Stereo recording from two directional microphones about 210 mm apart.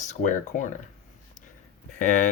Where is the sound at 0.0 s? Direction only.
35° left (ahead or behind).